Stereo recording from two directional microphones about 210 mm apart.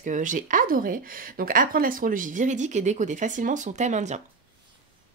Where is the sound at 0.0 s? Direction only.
40° right (ahead or behind).